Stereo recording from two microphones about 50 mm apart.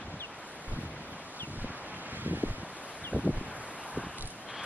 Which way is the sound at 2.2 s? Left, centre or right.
Right.